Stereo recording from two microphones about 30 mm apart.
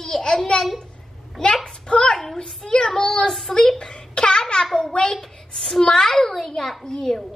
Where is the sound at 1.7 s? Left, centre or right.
Left.